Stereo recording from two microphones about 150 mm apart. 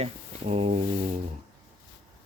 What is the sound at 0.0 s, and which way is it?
Speech, 40° right (ahead or behind).